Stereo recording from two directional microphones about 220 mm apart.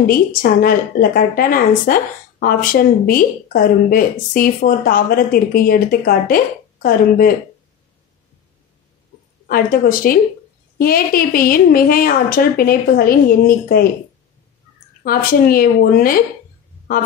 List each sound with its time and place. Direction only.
0.0 s speech: 40° left (ahead or behind)
9.5 s speech: 40° left (ahead or behind)
15.0 s speech: 40° left (ahead or behind)